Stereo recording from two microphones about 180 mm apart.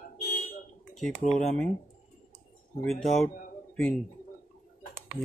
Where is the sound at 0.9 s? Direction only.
5° left (ahead or behind).